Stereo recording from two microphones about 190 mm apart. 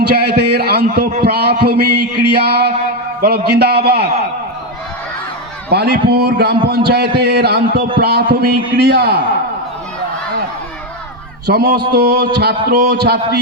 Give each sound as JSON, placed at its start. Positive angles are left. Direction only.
{"t": 0.1, "sound": "a sound", "side_deg": -60}
{"t": 1.2, "sound": "a man's voice", "side_deg": -60}
{"t": 5.6, "sound": "a man's voice", "side_deg": -60}
{"t": 11.4, "sound": "a man's voice", "side_deg": -60}